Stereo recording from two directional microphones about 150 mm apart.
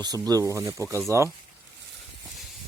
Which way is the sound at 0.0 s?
25° right (ahead or behind).